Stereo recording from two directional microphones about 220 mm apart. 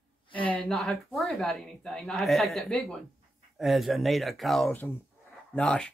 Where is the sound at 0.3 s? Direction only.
5° left (ahead or behind).